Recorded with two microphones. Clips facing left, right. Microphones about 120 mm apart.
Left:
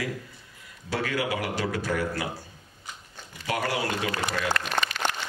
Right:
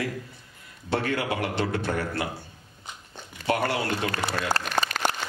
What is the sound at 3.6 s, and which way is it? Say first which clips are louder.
Speech: right 1 dB; 45° right (ahead or behind).